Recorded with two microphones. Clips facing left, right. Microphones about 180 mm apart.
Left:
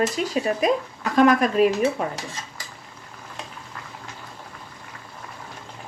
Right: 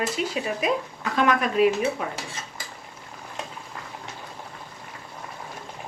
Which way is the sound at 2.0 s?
40° left (ahead or behind).